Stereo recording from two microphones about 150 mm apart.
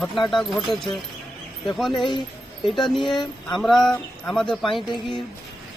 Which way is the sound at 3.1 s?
30° left (ahead or behind).